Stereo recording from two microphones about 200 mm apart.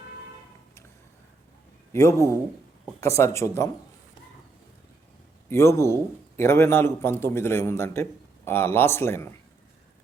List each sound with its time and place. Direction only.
1.9 s a man's voice: 15° left (ahead or behind)
5.5 s a man's voice: 15° left (ahead or behind)